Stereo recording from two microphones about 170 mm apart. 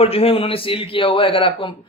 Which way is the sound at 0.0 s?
35° left (ahead or behind).